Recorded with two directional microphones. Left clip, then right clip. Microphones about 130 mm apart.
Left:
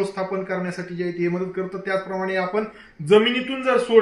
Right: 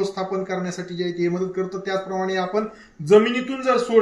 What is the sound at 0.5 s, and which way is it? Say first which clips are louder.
A man's voice: even; 25° right (ahead or behind).